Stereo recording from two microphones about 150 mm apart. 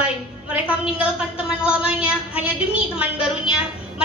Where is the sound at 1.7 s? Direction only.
10° right (ahead or behind).